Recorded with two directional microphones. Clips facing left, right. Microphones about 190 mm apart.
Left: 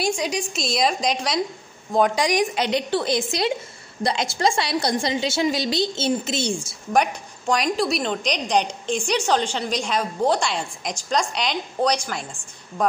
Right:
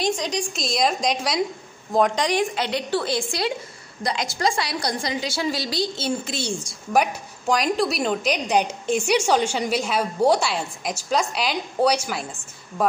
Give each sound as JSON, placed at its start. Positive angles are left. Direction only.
{"t": 0.0, "sound": "a woman's voice", "side_deg": 10}
{"t": 6.9, "sound": "a woman's voice", "side_deg": -5}